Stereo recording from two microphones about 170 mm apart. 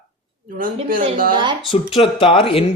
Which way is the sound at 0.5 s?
55° right (ahead or behind).